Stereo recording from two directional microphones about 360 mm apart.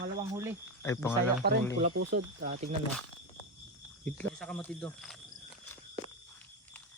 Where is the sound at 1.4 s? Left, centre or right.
Right.